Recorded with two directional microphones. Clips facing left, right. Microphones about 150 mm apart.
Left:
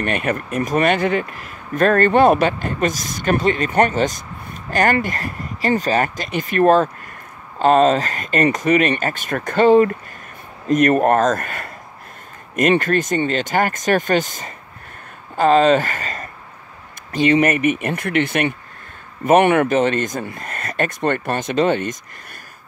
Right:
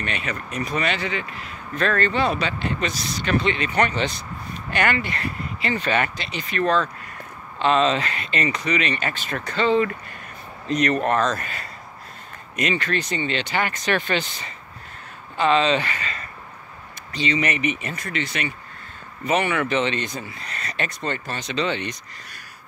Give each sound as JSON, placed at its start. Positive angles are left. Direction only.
{"t": 0.0, "sound": "speech", "side_deg": 50}